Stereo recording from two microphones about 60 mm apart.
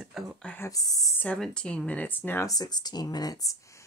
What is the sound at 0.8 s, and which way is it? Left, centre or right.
Speech, left.